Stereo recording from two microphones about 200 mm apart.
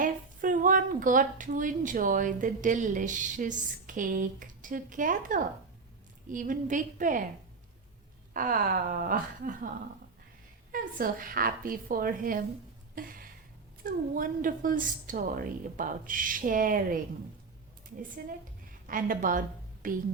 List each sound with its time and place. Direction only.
0.0 s a woman's voice: 40° right (ahead or behind)
8.3 s a woman's voice: 45° right (ahead or behind)
10.7 s a woman's voice: 45° right (ahead or behind)
13.0 s a sound: 45° right (ahead or behind)
13.8 s a woman's voice: 45° right (ahead or behind)
18.9 s a woman's voice: 45° right (ahead or behind)